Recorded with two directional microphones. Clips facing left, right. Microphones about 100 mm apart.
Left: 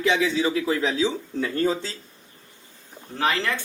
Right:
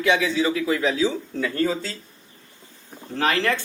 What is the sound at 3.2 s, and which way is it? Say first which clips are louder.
Speech: right 2 dB; 10° left (ahead or behind).